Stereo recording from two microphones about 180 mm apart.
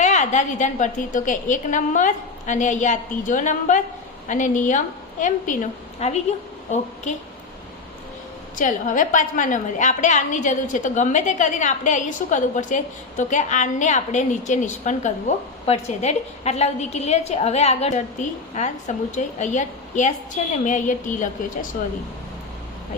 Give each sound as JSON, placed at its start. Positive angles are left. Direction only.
{"t": 0.0, "sound": "a woman's voice", "side_deg": 40}
{"t": 6.0, "sound": "a woman's voice", "side_deg": 35}
{"t": 8.5, "sound": "a woman's voice", "side_deg": 45}